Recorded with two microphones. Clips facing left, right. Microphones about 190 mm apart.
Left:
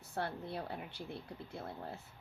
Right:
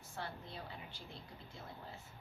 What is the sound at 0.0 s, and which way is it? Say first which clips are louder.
A woman's voice: left 7 dB; 60° left (ahead or behind).